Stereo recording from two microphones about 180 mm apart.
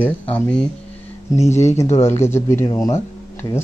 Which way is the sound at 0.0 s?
5° left (ahead or behind).